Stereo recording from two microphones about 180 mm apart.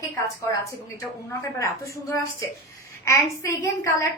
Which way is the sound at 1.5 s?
15° left (ahead or behind).